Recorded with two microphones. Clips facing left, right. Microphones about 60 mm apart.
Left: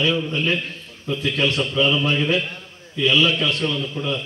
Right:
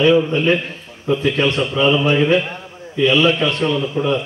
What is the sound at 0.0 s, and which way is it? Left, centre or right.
A man's voice, right.